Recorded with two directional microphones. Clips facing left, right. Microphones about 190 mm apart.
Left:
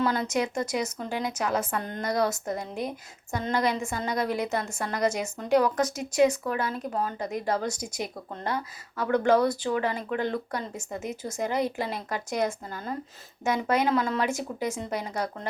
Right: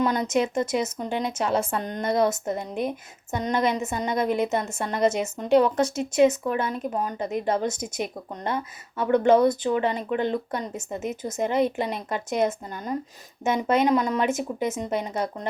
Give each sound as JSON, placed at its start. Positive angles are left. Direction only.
{"t": 0.0, "sound": "a woman's voice", "side_deg": -20}